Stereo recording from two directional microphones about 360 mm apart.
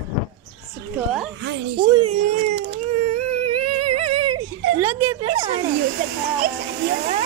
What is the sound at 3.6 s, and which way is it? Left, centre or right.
Humming, right.